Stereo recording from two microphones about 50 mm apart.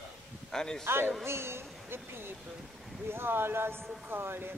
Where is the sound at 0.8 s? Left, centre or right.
Right.